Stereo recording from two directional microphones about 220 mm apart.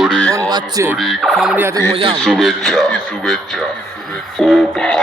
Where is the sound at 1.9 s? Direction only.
25° right (ahead or behind).